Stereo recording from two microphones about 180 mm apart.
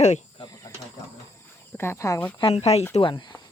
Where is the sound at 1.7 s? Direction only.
15° left (ahead or behind).